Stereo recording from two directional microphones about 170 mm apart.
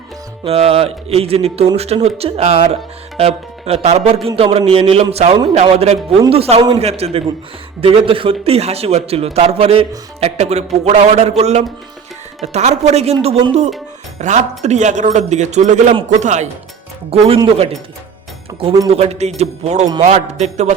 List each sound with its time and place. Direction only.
0.4 s a man's voice: 35° right (ahead or behind)
17.1 s a man's voice: 35° right (ahead or behind)
18.9 s a man's voice: 40° right (ahead or behind)